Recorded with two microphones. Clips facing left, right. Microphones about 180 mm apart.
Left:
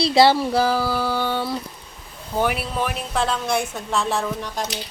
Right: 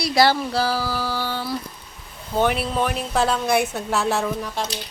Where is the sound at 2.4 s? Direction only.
5° left (ahead or behind).